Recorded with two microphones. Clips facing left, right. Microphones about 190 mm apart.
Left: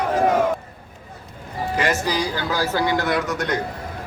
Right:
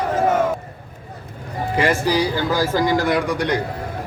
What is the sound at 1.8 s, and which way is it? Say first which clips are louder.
A man's voice: right 4 dB; 10° right (ahead or behind).